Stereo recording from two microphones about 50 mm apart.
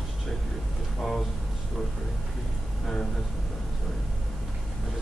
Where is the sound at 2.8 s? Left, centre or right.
Centre.